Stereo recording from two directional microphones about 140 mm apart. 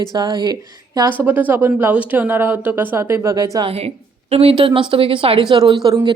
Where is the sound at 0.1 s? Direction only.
30° right (ahead or behind).